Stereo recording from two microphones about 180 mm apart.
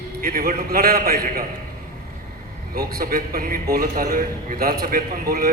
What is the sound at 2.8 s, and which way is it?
A man's voice, 55° right (ahead or behind).